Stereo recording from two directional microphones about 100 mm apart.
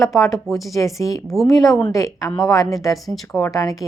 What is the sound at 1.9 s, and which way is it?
Speech, 35° left (ahead or behind).